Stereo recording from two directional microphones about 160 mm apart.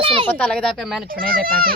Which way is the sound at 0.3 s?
10° left (ahead or behind).